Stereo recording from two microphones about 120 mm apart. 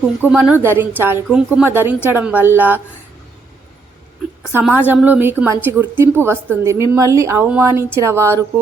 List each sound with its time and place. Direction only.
0.3 s a woman's voice: 10° right (ahead or behind)
4.6 s a woman's voice: 15° right (ahead or behind)